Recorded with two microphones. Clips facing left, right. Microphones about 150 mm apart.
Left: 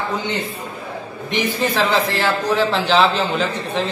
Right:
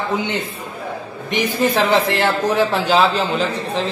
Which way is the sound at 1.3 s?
50° right (ahead or behind).